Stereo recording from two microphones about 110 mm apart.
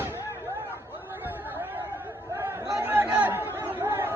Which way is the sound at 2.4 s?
25° right (ahead or behind).